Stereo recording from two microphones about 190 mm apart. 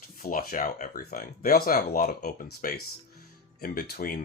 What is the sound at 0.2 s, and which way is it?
Speech, 45° left (ahead or behind).